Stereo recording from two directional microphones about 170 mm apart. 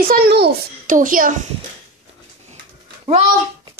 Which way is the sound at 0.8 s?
50° right (ahead or behind).